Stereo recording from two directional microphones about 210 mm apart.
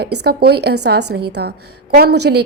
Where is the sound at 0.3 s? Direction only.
50° right (ahead or behind).